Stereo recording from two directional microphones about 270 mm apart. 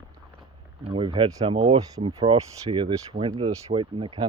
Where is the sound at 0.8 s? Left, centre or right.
Centre.